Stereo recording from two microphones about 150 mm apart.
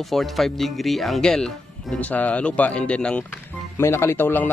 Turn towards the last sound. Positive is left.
turn(degrees=15)  # may be behind; listen again after turning